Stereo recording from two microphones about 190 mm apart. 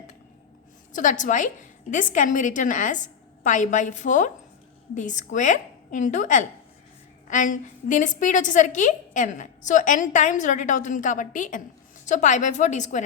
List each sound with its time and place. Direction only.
0.9 s a woman's voice: 40° left (ahead or behind)